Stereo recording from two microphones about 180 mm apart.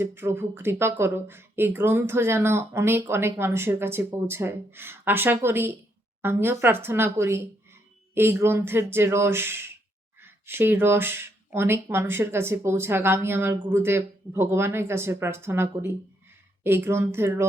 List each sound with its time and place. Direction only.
0.0 s speech: 15° right (ahead or behind)